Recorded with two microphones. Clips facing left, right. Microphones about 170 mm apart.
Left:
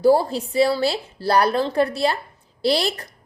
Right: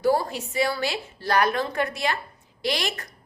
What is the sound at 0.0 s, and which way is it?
Speech, 30° left (ahead or behind).